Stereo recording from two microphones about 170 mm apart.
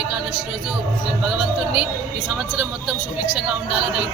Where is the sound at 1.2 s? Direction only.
5° right (ahead or behind).